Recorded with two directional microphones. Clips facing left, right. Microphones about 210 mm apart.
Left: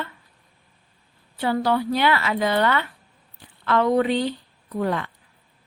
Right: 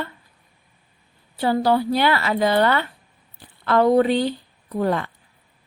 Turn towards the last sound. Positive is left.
turn(degrees=-40)  # may be behind; listen again after turning